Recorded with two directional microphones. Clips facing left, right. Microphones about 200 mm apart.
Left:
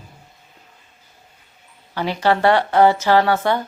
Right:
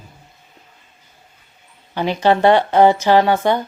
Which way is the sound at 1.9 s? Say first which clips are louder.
Right 3 dB; 20° right (ahead or behind).